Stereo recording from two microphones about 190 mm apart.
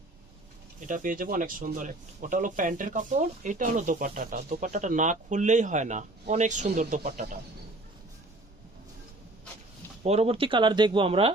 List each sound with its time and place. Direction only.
0.8 s speech: 45° right (ahead or behind)
10.0 s speech: 35° right (ahead or behind)